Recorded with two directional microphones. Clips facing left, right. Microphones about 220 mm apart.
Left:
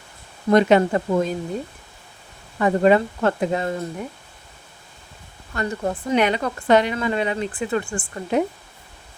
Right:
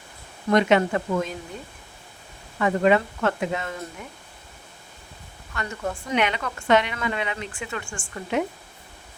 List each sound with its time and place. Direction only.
0.5 s speech: 35° left (ahead or behind)
2.6 s speech: 35° left (ahead or behind)
5.5 s speech: 35° left (ahead or behind)